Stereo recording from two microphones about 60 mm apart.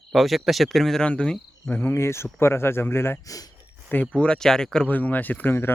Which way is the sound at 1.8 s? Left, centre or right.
Left.